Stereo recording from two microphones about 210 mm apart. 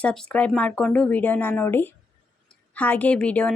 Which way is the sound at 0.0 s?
5° left (ahead or behind).